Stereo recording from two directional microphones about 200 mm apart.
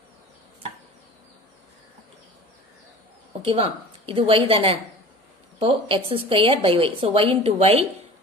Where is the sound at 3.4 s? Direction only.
30° right (ahead or behind).